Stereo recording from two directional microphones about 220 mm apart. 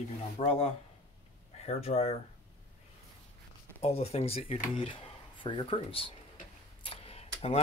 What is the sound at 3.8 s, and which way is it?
Speech, 30° left (ahead or behind).